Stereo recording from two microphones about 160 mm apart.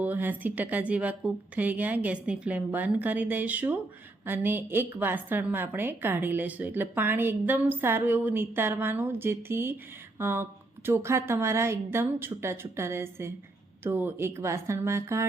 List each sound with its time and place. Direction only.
0.0 s a woman's voice: 10° right (ahead or behind)